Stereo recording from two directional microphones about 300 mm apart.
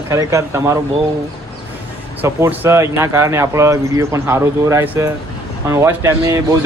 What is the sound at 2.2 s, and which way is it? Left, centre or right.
A man's voice, centre.